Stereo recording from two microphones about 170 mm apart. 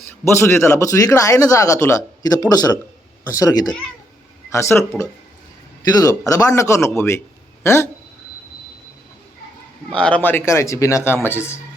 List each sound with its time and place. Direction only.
0.3 s speech: 15° left (ahead or behind)
5.9 s speech: 20° left (ahead or behind)
9.9 s speech: 5° left (ahead or behind)